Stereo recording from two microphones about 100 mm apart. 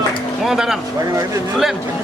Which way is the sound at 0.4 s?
5° right (ahead or behind).